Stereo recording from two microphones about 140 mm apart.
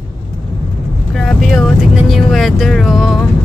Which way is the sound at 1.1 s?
Centre (ahead or behind).